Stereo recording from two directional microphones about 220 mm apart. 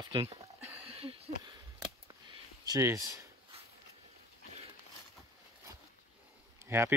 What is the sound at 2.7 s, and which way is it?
Speech, 15° right (ahead or behind).